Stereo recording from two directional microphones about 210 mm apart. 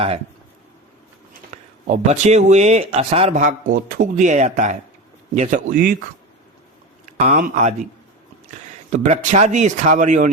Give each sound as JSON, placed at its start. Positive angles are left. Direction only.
{"t": 1.5, "sound": "a sound", "side_deg": -30}
{"t": 2.0, "sound": "speech", "side_deg": -30}
{"t": 7.0, "sound": "speech", "side_deg": -35}
{"t": 8.9, "sound": "speech", "side_deg": -35}